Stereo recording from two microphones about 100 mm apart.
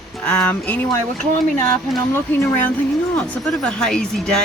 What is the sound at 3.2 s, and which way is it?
Speech, 5° left (ahead or behind).